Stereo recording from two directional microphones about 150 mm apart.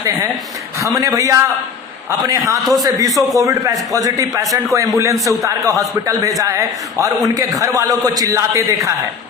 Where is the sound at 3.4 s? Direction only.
20° right (ahead or behind).